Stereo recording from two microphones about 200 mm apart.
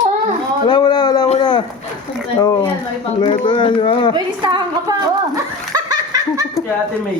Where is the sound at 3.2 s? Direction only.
25° left (ahead or behind).